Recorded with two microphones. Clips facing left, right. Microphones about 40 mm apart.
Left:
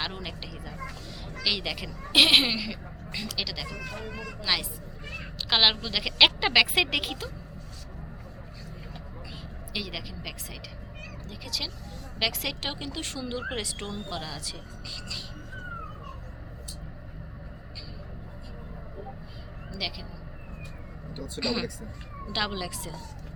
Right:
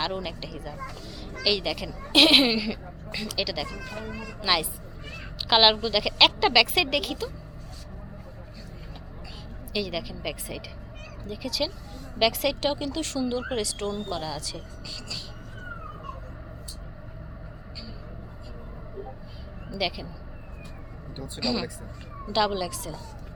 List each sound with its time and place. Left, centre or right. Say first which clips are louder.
0.0 s a woman's voice: right 5 dB; centre
5.4 s a woman's voice: right 4 dB; centre
5.8 s speech: right 1 dB; centre; by 7.3 s left
9.7 s speech: right 5 dB; centre
11.3 s a woman's voice: right 7 dB; centre
19.7 s speech: right 6 dB; centre
21.1 s speech: left 1 dB; centre
21.4 s speech: right 1 dB; left
22.3 s speech: right 6 dB; centre